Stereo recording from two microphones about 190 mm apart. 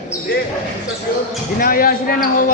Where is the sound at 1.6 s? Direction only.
50° left (ahead or behind).